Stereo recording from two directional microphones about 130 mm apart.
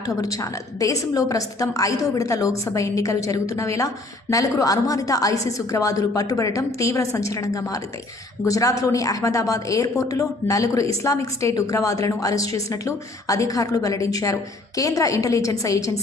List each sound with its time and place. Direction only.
0.0 s a woman's voice: 25° left (ahead or behind)